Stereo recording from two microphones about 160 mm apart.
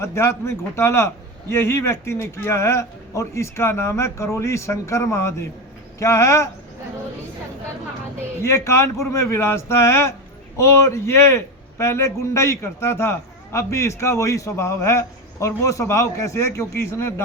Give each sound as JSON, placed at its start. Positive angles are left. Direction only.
{"t": 0.0, "sound": "a man's voice", "side_deg": 15}
{"t": 8.4, "sound": "a man's voice", "side_deg": 15}